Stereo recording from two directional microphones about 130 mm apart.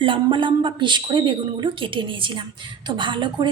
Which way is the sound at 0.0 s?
40° right (ahead or behind).